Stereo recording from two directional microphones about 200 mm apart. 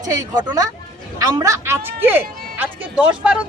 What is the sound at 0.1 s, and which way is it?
Speech, 20° right (ahead or behind).